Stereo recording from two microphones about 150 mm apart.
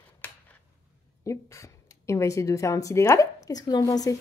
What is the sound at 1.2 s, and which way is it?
A woman's voice, 20° left (ahead or behind).